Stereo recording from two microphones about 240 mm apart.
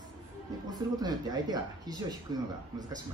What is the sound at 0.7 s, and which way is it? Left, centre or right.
Speech, centre.